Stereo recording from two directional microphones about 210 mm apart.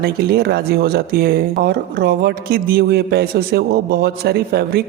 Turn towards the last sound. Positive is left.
turn(degrees=-50)  # may be behind; listen again after turning